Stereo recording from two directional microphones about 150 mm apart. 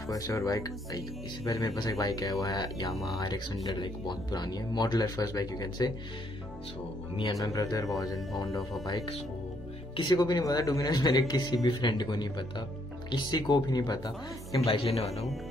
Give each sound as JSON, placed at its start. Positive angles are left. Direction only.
{"t": 0.0, "sound": "speech", "side_deg": 20}
{"t": 7.4, "sound": "speech", "side_deg": 25}
{"t": 14.7, "sound": "speech", "side_deg": 40}